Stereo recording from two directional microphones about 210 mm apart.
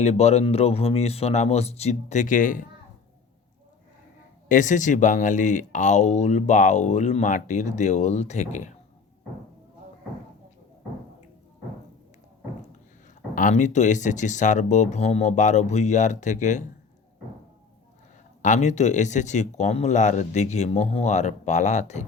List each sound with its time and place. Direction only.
0.0 s speech: 30° left (ahead or behind)
4.4 s speech: 35° left (ahead or behind)
13.3 s speech: 35° left (ahead or behind)
18.4 s speech: 35° left (ahead or behind)